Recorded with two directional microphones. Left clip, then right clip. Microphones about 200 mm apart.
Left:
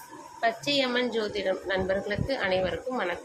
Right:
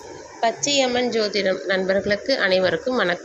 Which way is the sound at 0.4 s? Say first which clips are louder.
Right 6 dB; 10° right (ahead or behind).